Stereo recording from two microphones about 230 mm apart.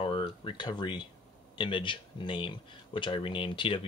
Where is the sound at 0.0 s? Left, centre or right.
Left.